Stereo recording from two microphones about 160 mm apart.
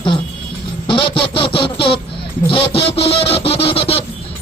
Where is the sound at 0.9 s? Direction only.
35° left (ahead or behind).